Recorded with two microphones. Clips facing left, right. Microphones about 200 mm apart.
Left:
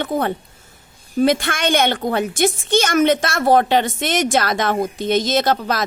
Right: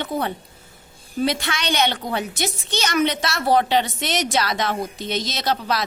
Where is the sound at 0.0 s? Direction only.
50° left (ahead or behind).